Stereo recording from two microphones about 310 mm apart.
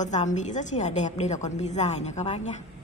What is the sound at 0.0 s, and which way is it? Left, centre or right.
A woman's voice, left.